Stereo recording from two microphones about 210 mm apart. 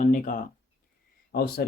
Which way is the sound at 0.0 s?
40° left (ahead or behind).